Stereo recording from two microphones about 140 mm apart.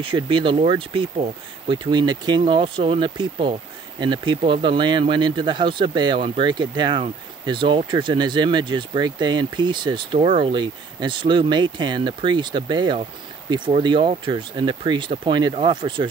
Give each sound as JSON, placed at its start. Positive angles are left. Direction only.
{"t": 0.0, "sound": "speech", "side_deg": -35}